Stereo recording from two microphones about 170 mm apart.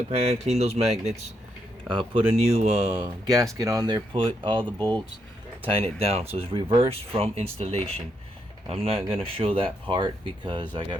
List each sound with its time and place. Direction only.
0.2 s speech: 35° right (ahead or behind)
3.2 s speech: 20° right (ahead or behind)
5.6 s speech: 35° right (ahead or behind)